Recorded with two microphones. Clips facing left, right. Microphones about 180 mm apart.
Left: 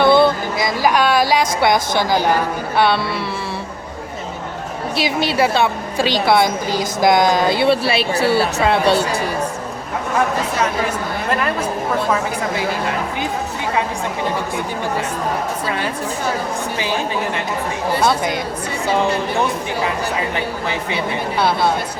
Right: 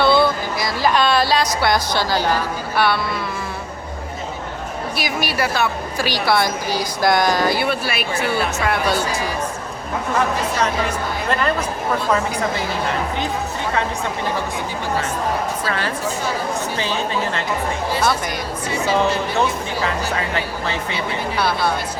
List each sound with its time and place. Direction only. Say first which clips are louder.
0.0 s a sound: left 3 dB; 20° left (ahead or behind)
1.6 s a woman's voice: left 3 dB; 20° left (ahead or behind)
4.9 s a woman's voice: left 6 dB; 25° left (ahead or behind)
11.3 s speech: even; 5° left (ahead or behind)
18.0 s a woman's voice: left 4 dB; 20° left (ahead or behind)
21.3 s a woman's voice: left 3 dB; 25° left (ahead or behind)